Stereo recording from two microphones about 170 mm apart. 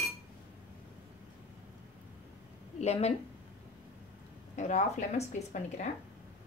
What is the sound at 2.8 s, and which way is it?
Speech, 40° left (ahead or behind).